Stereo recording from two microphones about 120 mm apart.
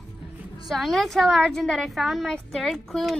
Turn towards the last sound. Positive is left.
turn(degrees=0)  # may be behind; listen again after turning